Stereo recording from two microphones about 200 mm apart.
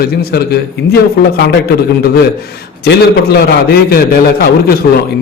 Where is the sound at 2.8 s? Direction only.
55° left (ahead or behind).